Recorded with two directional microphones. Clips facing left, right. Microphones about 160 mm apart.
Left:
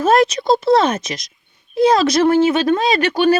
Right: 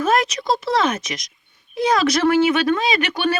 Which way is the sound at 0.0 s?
30° left (ahead or behind).